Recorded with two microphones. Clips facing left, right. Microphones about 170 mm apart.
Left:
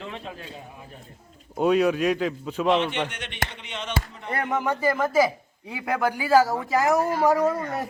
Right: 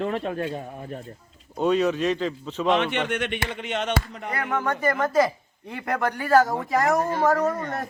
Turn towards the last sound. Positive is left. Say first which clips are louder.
# left 1 dB
turn(degrees=15)  # may be behind; listen again after turning